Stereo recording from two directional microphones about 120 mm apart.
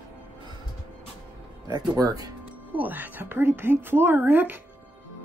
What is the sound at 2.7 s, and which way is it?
A woman's voice, 15° right (ahead or behind).